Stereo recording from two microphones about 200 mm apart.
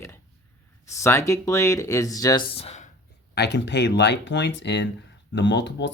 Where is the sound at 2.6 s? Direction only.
30° left (ahead or behind).